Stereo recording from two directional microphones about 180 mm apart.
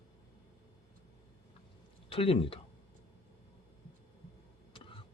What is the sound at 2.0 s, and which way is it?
Speech, 30° left (ahead or behind).